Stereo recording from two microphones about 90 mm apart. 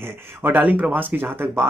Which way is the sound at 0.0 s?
20° right (ahead or behind).